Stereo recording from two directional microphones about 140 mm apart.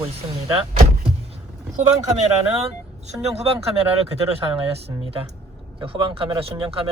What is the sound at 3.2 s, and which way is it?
Speech, 50° right (ahead or behind).